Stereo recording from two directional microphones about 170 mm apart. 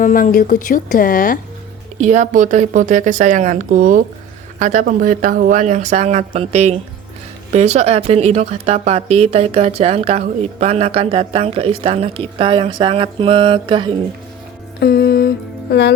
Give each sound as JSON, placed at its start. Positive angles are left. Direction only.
{"t": 0.0, "sound": "a woman's voice", "side_deg": 55}
{"t": 2.0, "sound": "speech", "side_deg": -45}
{"t": 14.8, "sound": "music", "side_deg": 70}